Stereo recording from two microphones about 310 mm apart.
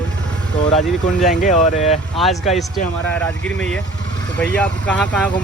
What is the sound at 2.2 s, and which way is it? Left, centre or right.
Speech, centre.